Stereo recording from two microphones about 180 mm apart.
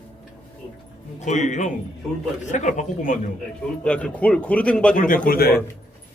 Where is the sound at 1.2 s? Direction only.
40° left (ahead or behind).